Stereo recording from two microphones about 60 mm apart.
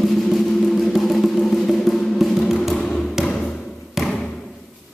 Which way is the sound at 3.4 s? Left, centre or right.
Centre.